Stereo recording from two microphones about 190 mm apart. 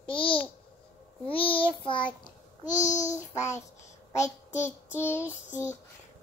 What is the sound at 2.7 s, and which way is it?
Babbling, 40° left (ahead or behind).